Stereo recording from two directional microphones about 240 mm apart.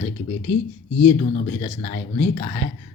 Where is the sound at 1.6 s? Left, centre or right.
Left.